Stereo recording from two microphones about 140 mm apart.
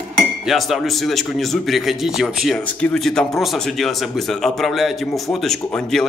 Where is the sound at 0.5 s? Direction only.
Centre (ahead or behind).